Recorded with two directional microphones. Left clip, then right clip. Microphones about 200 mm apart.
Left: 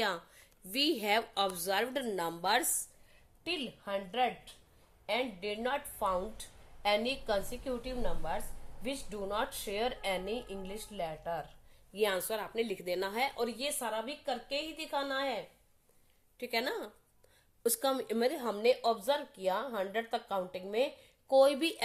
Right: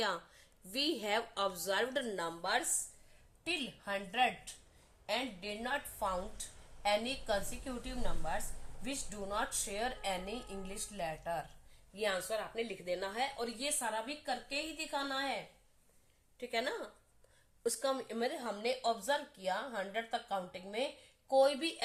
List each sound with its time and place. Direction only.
0.7 s a woman's voice: 20° left (ahead or behind)
2.4 s a woman's voice: 40° left (ahead or behind)
9.6 s speech: 40° left (ahead or behind)
11.9 s a woman's voice: 45° left (ahead or behind)
16.4 s a woman's voice: 35° left (ahead or behind)